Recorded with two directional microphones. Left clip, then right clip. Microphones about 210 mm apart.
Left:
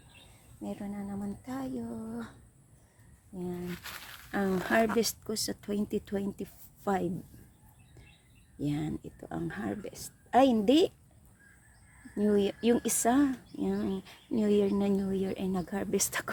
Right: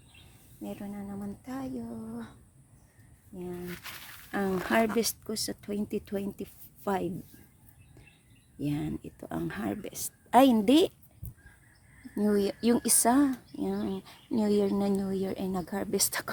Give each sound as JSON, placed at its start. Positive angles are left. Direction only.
{"t": 0.6, "sound": "speech", "side_deg": 0}
{"t": 3.3, "sound": "speech", "side_deg": 0}
{"t": 8.5, "sound": "speech", "side_deg": 0}
{"t": 9.3, "sound": "speech", "side_deg": -15}
{"t": 12.1, "sound": "speech", "side_deg": -10}